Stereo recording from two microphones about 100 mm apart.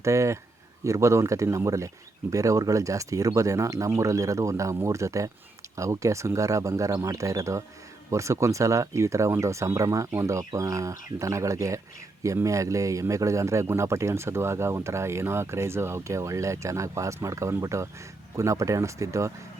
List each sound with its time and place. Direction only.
0.0 s speech: 30° right (ahead or behind)